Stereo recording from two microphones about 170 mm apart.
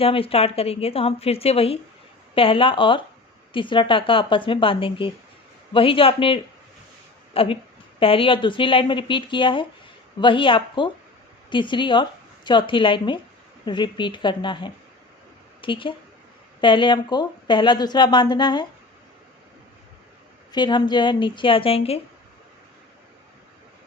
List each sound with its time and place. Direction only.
0.0 s a woman's voice: 35° left (ahead or behind)
20.5 s a woman's voice: 25° left (ahead or behind)